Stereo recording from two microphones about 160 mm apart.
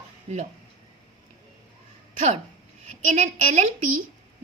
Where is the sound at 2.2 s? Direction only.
50° right (ahead or behind).